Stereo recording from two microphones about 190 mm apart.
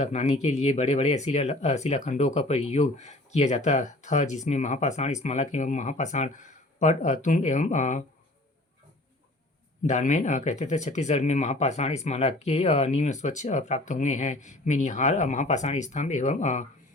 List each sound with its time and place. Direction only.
0.0 s speech: 35° left (ahead or behind)
9.8 s speech: 40° left (ahead or behind)